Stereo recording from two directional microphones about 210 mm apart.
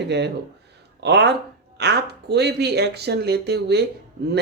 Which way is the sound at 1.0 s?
55° right (ahead or behind).